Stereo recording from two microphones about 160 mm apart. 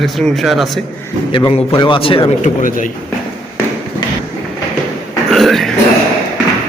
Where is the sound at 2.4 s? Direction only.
55° left (ahead or behind).